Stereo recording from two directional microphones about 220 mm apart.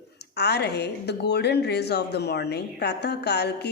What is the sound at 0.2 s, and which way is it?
A woman's voice, 50° left (ahead or behind).